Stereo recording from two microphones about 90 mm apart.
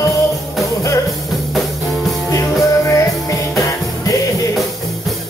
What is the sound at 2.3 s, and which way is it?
Music, 35° left (ahead or behind).